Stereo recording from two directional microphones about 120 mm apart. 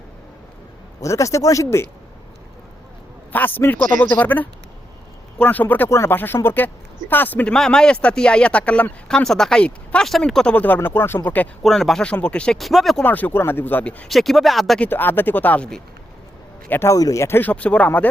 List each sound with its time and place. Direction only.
1.0 s speech: 25° left (ahead or behind)
3.3 s speech: 15° left (ahead or behind)
11.6 s speech: centre (ahead or behind)
13.0 s speech: 15° left (ahead or behind)
14.8 s speech: 15° left (ahead or behind)
16.9 s speech: 30° left (ahead or behind); by 18.1 s 15° left (ahead or behind)